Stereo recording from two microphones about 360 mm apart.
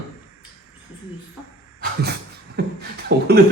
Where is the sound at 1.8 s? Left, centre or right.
Right.